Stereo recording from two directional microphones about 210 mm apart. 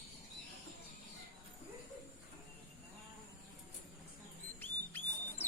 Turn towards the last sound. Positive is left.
turn(degrees=10)  # may be behind; listen again after turning